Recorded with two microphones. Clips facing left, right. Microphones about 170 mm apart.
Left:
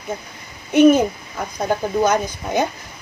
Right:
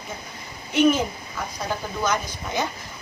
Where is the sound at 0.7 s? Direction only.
50° left (ahead or behind).